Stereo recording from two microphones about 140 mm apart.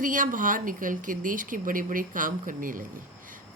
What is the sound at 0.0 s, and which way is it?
Speech, 70° right (ahead or behind).